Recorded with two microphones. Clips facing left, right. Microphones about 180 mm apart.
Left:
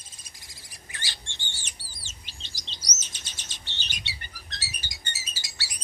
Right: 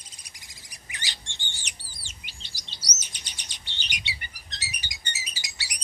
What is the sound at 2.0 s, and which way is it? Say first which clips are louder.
Chirp: even; 15° right (ahead or behind).